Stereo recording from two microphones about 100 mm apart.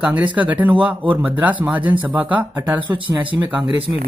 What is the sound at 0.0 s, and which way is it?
Speech, 15° right (ahead or behind).